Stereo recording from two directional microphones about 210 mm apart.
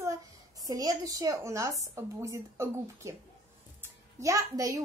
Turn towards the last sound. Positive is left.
turn(degrees=-15)  # may be behind; listen again after turning